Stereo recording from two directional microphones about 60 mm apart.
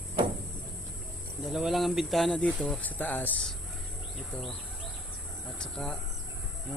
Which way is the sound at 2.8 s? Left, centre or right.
Left.